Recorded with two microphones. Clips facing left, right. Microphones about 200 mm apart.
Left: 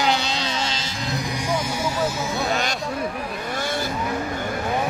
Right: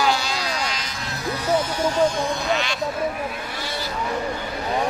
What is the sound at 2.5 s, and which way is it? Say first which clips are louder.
Sheep: right 1 dB; 45° left (ahead or behind).